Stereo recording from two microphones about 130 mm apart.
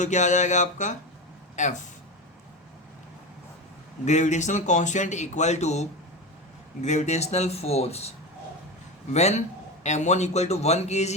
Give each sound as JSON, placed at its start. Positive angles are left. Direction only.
{"t": 0.0, "sound": "speech", "side_deg": 65}
{"t": 4.0, "sound": "speech", "side_deg": 65}
{"t": 9.1, "sound": "speech", "side_deg": 55}